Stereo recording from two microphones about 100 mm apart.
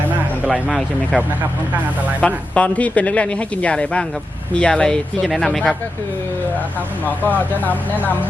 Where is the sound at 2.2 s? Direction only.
15° left (ahead or behind).